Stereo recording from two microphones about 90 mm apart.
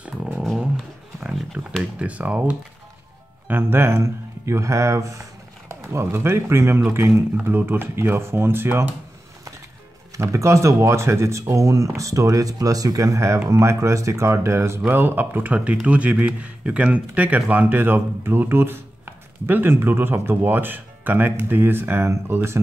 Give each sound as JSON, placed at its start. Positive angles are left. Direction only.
{"t": 1.2, "sound": "a sound", "side_deg": 0}
{"t": 1.8, "sound": "speech", "side_deg": -15}
{"t": 10.1, "sound": "speech", "side_deg": -35}